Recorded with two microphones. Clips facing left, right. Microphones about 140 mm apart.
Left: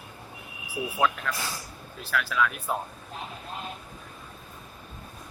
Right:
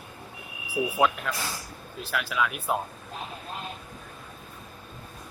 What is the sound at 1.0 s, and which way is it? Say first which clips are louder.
Speech: even; 15° right (ahead or behind).